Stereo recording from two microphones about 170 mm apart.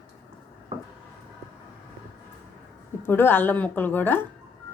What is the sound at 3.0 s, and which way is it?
A woman's voice, 10° left (ahead or behind).